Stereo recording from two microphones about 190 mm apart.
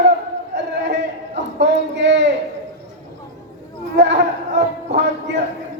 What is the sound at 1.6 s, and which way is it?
Speech, 65° right (ahead or behind).